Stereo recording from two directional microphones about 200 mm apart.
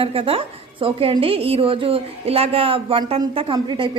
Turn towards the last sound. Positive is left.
turn(degrees=-25)  # may be behind; listen again after turning